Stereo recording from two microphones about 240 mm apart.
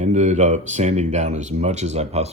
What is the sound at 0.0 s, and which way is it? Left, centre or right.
Speech, right.